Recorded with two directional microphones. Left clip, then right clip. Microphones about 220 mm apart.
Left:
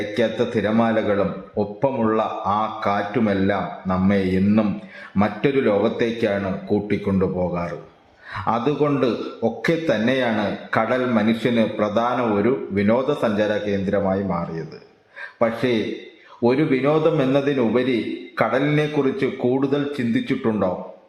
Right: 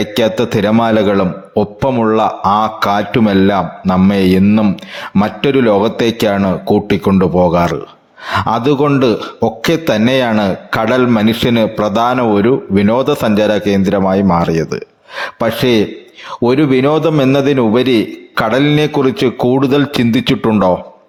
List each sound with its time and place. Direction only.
0.1 s a man's voice: 40° right (ahead or behind)